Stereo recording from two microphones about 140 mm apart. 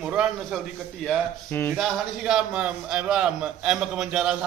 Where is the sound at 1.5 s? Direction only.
15° left (ahead or behind).